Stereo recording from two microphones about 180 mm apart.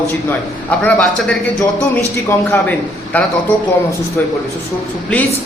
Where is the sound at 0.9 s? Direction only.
5° left (ahead or behind).